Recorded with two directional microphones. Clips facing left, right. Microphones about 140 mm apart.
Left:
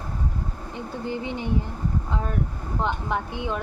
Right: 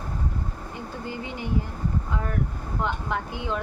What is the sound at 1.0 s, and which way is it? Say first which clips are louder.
Speech: left 6 dB; 20° left (ahead or behind).